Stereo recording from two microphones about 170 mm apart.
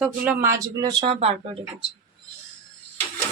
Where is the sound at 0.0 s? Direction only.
5° right (ahead or behind).